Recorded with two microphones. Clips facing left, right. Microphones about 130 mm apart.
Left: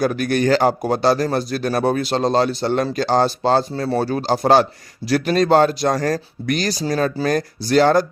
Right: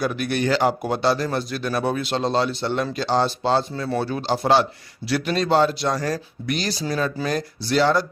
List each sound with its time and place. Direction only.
0.0 s a man's voice: 45° left (ahead or behind)